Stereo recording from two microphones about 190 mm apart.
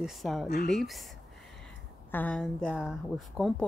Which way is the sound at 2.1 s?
5° left (ahead or behind).